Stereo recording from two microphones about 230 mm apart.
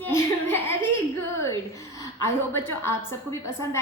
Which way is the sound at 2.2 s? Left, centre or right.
Centre.